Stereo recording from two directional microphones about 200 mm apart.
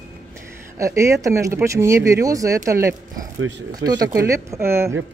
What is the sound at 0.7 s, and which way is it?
Speech, 15° right (ahead or behind).